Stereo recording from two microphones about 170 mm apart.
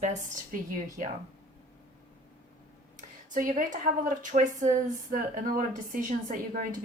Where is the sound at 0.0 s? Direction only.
45° right (ahead or behind).